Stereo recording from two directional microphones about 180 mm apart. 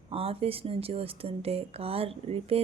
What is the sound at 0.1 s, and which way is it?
Speech, 30° right (ahead or behind).